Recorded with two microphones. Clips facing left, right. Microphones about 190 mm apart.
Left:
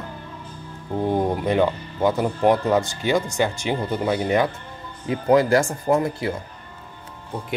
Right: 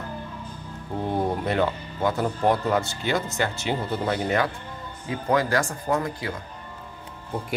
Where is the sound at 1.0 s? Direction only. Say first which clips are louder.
Left 4 dB; 15° left (ahead or behind).